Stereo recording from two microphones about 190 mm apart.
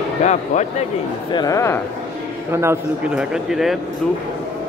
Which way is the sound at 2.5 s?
15° right (ahead or behind).